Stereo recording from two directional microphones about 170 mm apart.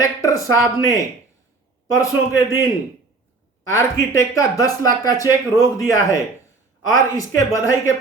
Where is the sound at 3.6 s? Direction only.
15° left (ahead or behind).